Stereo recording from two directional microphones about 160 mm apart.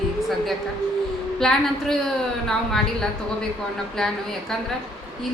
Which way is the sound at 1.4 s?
5° left (ahead or behind).